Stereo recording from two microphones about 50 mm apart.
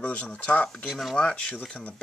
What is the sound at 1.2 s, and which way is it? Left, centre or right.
Speech, left.